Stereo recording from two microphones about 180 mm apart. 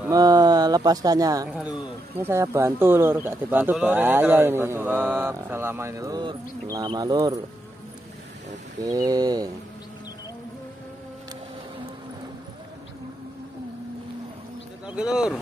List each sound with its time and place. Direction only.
0.1 s speech: 20° right (ahead or behind)
1.5 s speech: 10° right (ahead or behind)
8.8 s a sound: 20° right (ahead or behind)
14.9 s speech: 5° right (ahead or behind)